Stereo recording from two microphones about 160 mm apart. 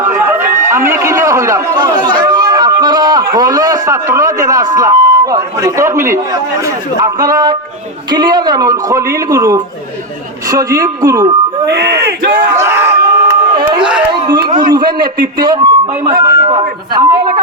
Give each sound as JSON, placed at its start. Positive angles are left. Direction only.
{"t": 0.7, "sound": "a man's voice", "side_deg": -15}
{"t": 1.7, "sound": "a sound", "side_deg": -25}
{"t": 4.1, "sound": "speech", "side_deg": -20}
{"t": 11.6, "sound": "speech", "side_deg": -90}
{"t": 12.0, "sound": "battle cry", "side_deg": -60}
{"t": 12.5, "sound": "crowd", "side_deg": -15}
{"t": 14.1, "sound": "speech", "side_deg": -25}